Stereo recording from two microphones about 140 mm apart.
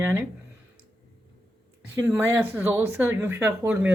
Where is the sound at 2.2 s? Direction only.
15° right (ahead or behind).